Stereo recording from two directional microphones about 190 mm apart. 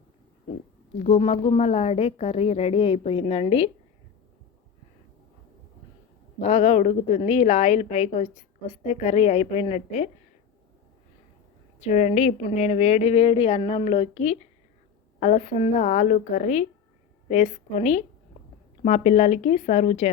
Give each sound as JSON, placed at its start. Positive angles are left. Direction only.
{"t": 0.9, "sound": "a woman's voice", "side_deg": 35}
{"t": 6.4, "sound": "a woman's voice", "side_deg": 35}
{"t": 11.9, "sound": "a woman's voice", "side_deg": 40}